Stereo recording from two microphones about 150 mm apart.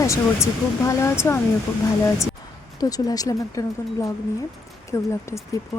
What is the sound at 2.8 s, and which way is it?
Speech, 25° left (ahead or behind).